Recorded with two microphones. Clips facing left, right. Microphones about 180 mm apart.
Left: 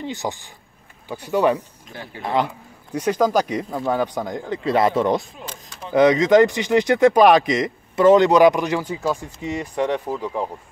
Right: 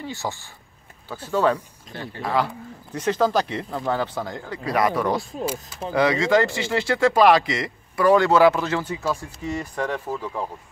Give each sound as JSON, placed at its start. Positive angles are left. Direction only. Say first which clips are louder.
{"t": 0.0, "sound": "speech", "louder": "left 3 dB", "side_deg": 20}
{"t": 5.4, "sound": "speech", "louder": "right 9 dB", "side_deg": -10}
{"t": 5.9, "sound": "speech", "louder": "left 6 dB", "side_deg": 20}